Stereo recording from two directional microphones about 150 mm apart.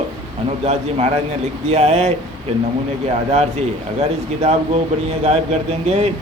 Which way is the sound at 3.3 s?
45° right (ahead or behind).